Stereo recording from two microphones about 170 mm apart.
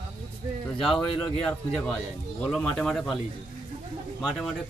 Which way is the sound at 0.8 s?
5° left (ahead or behind).